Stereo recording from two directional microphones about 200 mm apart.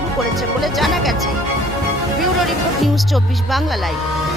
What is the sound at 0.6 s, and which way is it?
Speech, centre (ahead or behind).